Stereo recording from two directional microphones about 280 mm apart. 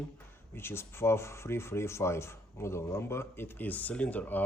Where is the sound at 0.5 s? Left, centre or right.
Centre.